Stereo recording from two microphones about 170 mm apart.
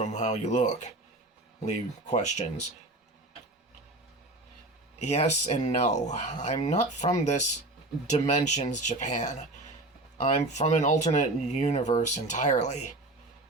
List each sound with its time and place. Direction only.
0.0 s speech: 40° left (ahead or behind)
5.0 s speech: 40° left (ahead or behind)